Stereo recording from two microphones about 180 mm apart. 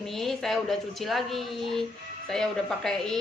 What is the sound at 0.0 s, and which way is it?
A woman's voice, centre (ahead or behind).